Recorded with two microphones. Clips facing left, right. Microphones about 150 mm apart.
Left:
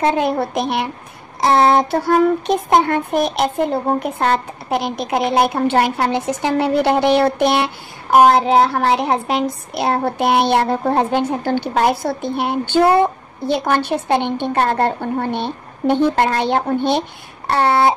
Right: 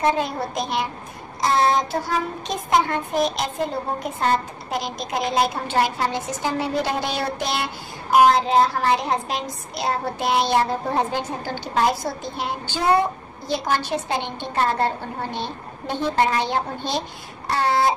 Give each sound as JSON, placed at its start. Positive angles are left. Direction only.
{"t": 0.0, "sound": "child singing", "side_deg": 60}